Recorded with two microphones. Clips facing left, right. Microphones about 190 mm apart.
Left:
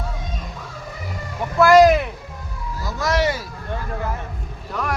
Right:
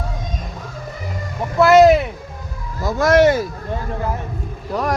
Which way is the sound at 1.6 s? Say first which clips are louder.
Right 2 dB; 25° right (ahead or behind).